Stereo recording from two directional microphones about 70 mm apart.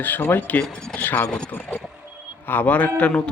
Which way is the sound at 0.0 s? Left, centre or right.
Left.